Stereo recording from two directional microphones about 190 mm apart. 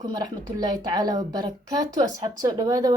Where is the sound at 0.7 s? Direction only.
20° right (ahead or behind).